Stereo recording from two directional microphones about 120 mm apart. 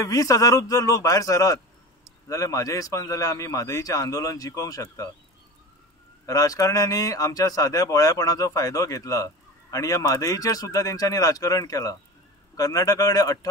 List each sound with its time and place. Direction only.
0.0 s speech: 30° left (ahead or behind)
6.2 s speech: 30° left (ahead or behind)